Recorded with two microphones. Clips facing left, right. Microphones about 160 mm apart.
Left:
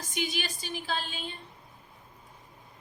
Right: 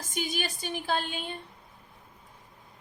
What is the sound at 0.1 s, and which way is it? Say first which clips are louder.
A woman's voice: right 1 dB; 45° right (ahead or behind).